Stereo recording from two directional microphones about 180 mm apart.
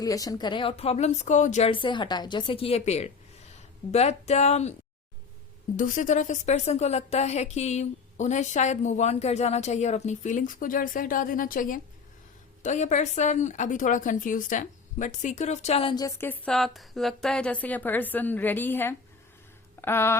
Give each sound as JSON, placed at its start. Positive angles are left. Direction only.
{"t": 0.0, "sound": "a woman's voice", "side_deg": 20}
{"t": 5.7, "sound": "a woman's voice", "side_deg": 45}